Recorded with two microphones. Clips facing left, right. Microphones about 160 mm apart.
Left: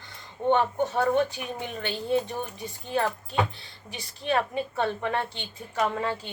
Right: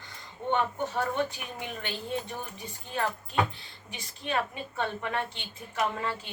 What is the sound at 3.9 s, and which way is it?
Speech, 35° left (ahead or behind).